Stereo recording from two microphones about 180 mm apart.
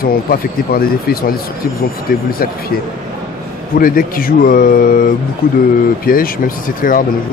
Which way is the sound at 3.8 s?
55° left (ahead or behind).